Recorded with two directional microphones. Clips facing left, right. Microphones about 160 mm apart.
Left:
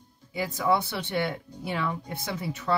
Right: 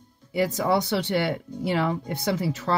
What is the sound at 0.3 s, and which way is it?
Speech, 80° right.